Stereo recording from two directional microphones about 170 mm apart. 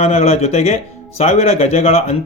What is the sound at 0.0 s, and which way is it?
A man's voice, 35° left (ahead or behind).